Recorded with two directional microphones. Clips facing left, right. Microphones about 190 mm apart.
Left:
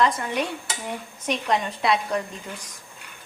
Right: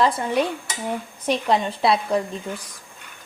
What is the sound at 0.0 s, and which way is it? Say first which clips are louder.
A woman's voice: right 3 dB; 30° right (ahead or behind).